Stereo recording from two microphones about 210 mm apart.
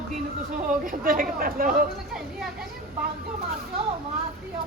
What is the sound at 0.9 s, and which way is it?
A man's voice, 40° right (ahead or behind).